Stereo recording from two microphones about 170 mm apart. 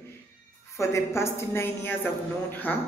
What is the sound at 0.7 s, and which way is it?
Speech, 15° left (ahead or behind).